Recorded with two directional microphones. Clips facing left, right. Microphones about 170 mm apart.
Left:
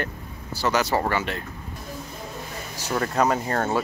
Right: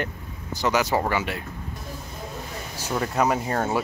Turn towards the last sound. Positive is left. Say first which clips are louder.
# even
turn(degrees=-10)  # may be behind; listen again after turning